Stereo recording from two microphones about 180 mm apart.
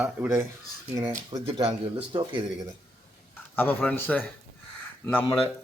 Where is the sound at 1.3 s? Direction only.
30° right (ahead or behind).